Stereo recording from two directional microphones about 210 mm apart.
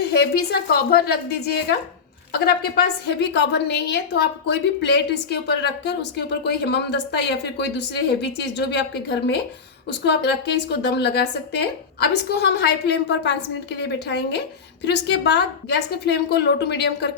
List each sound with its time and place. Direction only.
0.0 s a woman's voice: 50° left (ahead or behind)
2.3 s a woman's voice: 50° left (ahead or behind)